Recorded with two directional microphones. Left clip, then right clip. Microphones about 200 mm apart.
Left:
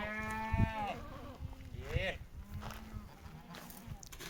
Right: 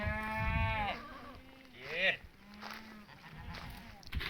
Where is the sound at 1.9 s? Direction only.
10° right (ahead or behind).